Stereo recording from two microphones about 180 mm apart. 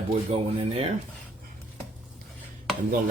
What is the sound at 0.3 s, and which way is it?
Speech, 35° right (ahead or behind).